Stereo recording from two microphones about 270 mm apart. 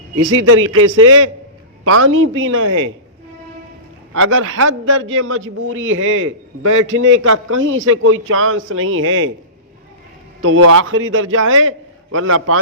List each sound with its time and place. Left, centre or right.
0.2 s a man's voice: right
4.1 s a man's voice: right
10.4 s a man's voice: right